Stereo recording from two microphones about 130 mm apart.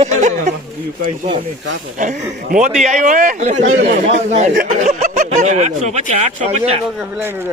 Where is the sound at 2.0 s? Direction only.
80° right; by 6.8 s 55° right (ahead or behind).